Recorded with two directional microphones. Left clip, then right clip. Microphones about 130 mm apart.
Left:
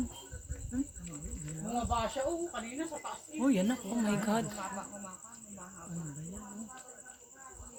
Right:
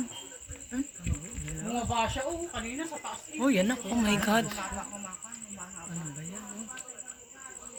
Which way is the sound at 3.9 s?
55° right (ahead or behind).